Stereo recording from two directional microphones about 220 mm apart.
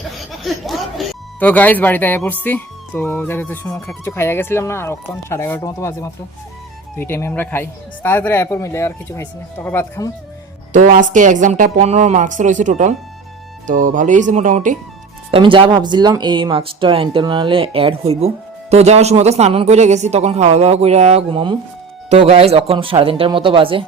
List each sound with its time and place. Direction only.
0.3 s speech: centre (ahead or behind)
10.7 s a woman's voice: 35° right (ahead or behind)
15.3 s speech: 20° right (ahead or behind)